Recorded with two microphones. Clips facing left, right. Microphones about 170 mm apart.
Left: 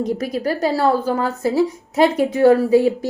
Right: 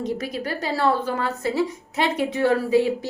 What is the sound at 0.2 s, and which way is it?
A woman's voice, 40° left (ahead or behind).